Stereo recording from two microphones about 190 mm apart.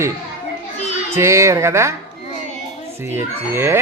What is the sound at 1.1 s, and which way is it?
Speech, 15° right (ahead or behind).